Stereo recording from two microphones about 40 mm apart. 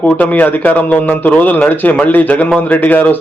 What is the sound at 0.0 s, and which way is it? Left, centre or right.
A man's voice, left.